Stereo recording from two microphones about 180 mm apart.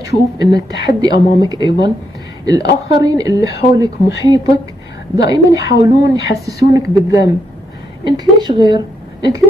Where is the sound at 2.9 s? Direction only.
20° right (ahead or behind).